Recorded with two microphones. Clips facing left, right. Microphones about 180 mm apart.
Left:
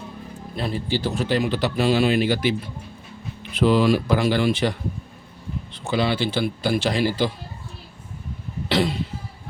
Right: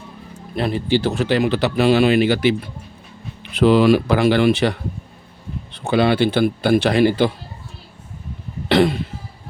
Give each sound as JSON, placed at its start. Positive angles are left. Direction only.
{"t": 0.5, "sound": "speech", "side_deg": -65}
{"t": 5.7, "sound": "speech", "side_deg": -60}
{"t": 8.7, "sound": "cough", "side_deg": -55}